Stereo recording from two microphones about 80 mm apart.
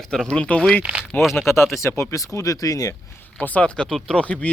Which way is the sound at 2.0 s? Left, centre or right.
Left.